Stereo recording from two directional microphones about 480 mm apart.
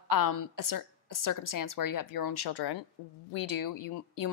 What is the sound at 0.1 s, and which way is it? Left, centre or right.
A woman's voice, left.